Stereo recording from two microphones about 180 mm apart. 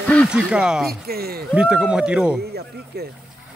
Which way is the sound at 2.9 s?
60° right (ahead or behind).